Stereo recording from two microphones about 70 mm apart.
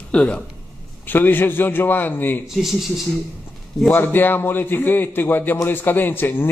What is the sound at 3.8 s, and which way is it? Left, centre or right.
A man's voice, left.